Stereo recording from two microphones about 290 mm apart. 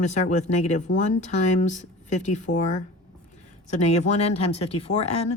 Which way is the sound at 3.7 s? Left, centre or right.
Left.